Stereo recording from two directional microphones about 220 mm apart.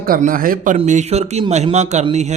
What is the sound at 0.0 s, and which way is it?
Speech, 40° right (ahead or behind).